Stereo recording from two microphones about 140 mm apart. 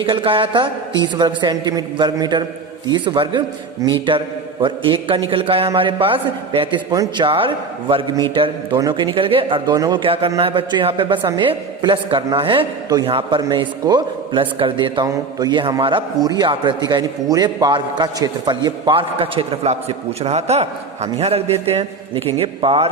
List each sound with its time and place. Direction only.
0.0 s a man's voice: 40° right (ahead or behind)
4.6 s a man's voice: 35° right (ahead or behind)
6.9 s speech: 25° right (ahead or behind)
7.3 s a man's voice: 40° right (ahead or behind)
9.7 s speech: 25° right (ahead or behind)
10.0 s a man's voice: 40° right (ahead or behind)